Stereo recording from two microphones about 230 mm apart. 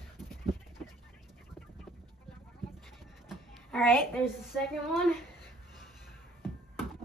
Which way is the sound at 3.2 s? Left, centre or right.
Centre.